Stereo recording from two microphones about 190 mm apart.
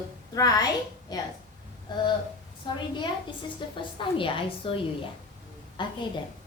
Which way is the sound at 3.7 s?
25° left (ahead or behind).